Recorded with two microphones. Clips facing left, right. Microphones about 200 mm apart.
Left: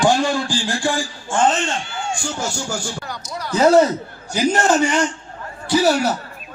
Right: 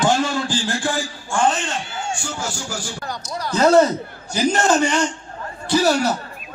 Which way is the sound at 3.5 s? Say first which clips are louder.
Left 1 dB; 10° left (ahead or behind).